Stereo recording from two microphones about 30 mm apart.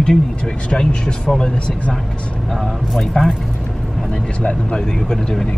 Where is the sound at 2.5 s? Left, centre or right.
Centre.